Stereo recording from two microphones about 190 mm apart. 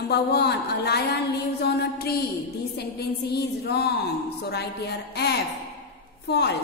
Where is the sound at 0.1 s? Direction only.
60° left (ahead or behind).